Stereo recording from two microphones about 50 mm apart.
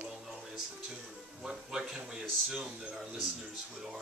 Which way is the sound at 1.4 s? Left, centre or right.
Centre.